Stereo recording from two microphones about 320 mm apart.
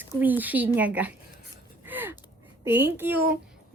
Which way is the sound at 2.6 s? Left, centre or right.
Centre.